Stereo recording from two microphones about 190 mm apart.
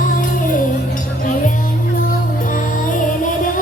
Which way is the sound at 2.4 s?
45° left (ahead or behind).